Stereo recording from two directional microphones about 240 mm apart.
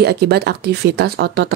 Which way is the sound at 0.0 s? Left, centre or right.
Right.